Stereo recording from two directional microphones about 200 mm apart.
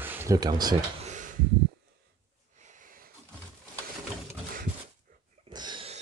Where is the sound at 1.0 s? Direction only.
40° right (ahead or behind).